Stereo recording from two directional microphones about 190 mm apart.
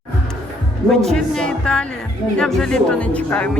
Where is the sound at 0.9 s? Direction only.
Centre (ahead or behind).